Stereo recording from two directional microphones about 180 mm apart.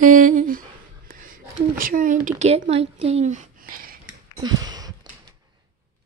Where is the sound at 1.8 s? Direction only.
50° right (ahead or behind).